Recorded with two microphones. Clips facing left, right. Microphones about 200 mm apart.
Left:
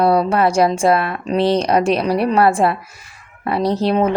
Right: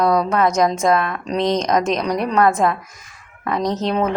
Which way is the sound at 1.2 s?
10° left (ahead or behind).